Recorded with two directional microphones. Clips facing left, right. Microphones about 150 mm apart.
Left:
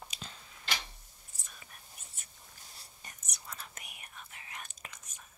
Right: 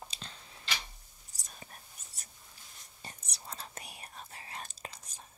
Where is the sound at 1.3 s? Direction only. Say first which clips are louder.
Right 4 dB; 35° right (ahead or behind).